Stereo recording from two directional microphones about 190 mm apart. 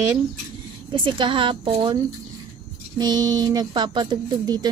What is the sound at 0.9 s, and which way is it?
Speech, 25° right (ahead or behind).